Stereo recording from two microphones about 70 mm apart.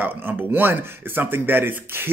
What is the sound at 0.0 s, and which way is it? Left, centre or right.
Speech, right.